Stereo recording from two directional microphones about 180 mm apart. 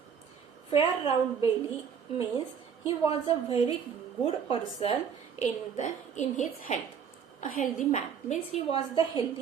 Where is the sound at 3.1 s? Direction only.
30° left (ahead or behind).